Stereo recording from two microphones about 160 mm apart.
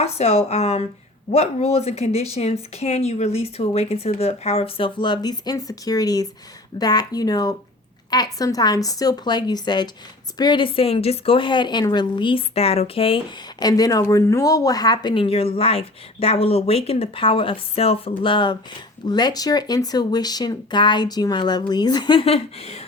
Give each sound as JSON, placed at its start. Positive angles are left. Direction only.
{"t": 0.0, "sound": "a woman's voice", "side_deg": 40}